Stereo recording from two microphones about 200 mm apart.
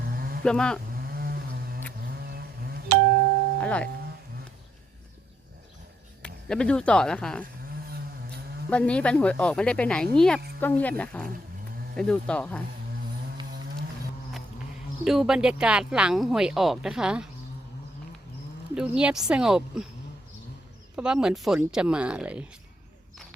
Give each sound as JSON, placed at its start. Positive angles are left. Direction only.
{"t": 0.0, "sound": "livestock", "side_deg": -45}
{"t": 0.4, "sound": "speech", "side_deg": 5}
{"t": 0.9, "sound": "a sound", "side_deg": -50}
{"t": 3.6, "sound": "speech", "side_deg": 5}
{"t": 6.2, "sound": "speech", "side_deg": 5}
{"t": 7.9, "sound": "a sound", "side_deg": -50}
{"t": 8.7, "sound": "speech", "side_deg": 5}
{"t": 15.0, "sound": "speech", "side_deg": 0}
{"t": 18.7, "sound": "speech", "side_deg": -5}
{"t": 20.9, "sound": "speech", "side_deg": -5}